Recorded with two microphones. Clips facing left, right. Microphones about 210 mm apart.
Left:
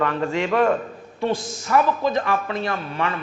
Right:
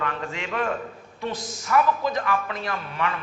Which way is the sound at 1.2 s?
30° left (ahead or behind).